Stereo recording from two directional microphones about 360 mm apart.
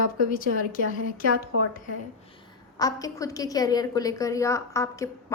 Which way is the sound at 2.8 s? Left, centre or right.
Centre.